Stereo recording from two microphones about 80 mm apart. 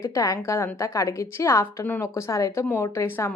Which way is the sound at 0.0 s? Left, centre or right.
Left.